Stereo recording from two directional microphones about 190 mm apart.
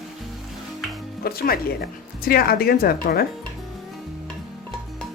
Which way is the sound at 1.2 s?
50° left (ahead or behind).